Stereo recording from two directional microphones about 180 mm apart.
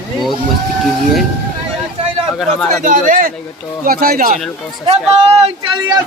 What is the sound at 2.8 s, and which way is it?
A man's voice, 50° right (ahead or behind).